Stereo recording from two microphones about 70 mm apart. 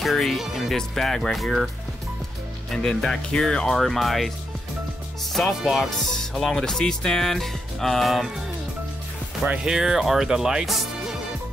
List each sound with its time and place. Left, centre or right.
0.0 s speech: centre
2.7 s speech: centre
5.3 s speech: centre
9.5 s speech: centre